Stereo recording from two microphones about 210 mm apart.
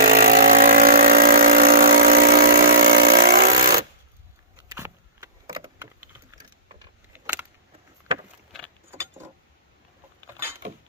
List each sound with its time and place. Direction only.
0.0 s vehicle: 45° right (ahead or behind)
4.7 s computer keyboard: 15° right (ahead or behind)
7.1 s keys jangling: 10° right (ahead or behind)